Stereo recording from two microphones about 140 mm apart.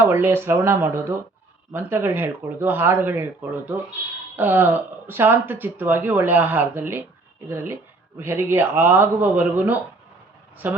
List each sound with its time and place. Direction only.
0.0 s speech: 15° right (ahead or behind)